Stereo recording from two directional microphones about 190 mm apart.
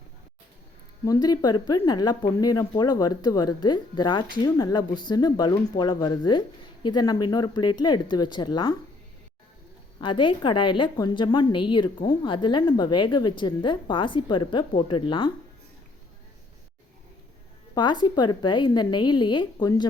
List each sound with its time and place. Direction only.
1.0 s a woman's voice: 20° left (ahead or behind)
10.0 s a woman's voice: 25° left (ahead or behind)
17.7 s a woman's voice: 25° left (ahead or behind)